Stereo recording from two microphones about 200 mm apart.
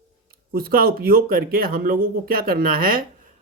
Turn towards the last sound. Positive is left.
turn(degrees=-45)  # may be behind; listen again after turning